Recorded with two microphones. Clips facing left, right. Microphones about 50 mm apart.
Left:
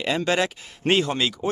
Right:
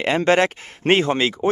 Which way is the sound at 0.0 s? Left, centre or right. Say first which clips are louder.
Right 6 dB; right.